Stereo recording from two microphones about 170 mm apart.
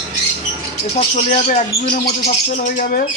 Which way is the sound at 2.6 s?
55° left (ahead or behind).